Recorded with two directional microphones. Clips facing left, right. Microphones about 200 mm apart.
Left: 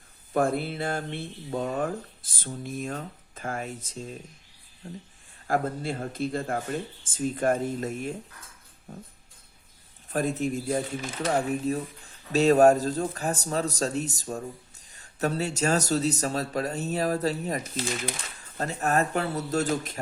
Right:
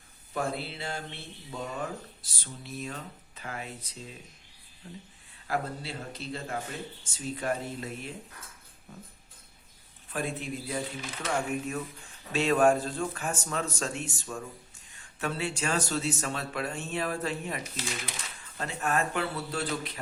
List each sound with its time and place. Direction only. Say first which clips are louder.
0.3 s speech: left 8 dB; 50° left (ahead or behind)
10.1 s speech: left 7 dB; 40° left (ahead or behind)